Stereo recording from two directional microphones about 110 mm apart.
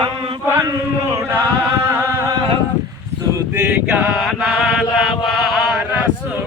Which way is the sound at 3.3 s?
15° right (ahead or behind).